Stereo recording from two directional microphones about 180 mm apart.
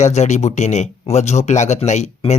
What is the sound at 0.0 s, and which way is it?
Speech, 40° left (ahead or behind).